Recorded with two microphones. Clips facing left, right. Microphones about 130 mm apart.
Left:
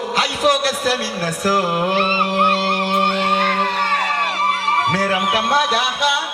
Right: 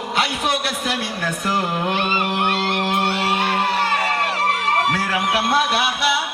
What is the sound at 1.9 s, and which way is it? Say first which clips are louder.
Music: left 3 dB; 35° left (ahead or behind).